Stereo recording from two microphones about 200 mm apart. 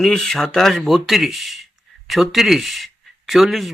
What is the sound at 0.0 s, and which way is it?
Speech, centre (ahead or behind).